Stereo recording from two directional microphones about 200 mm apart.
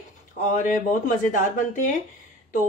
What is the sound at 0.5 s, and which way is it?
Speech, 40° left (ahead or behind).